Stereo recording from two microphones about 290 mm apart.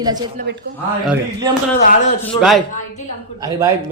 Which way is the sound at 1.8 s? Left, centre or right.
Left.